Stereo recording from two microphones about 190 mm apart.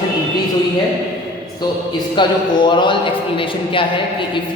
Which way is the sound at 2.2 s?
25° left (ahead or behind).